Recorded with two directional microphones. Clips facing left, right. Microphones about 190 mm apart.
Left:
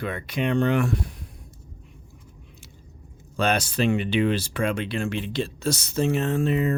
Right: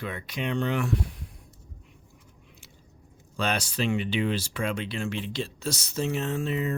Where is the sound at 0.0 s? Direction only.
60° left (ahead or behind).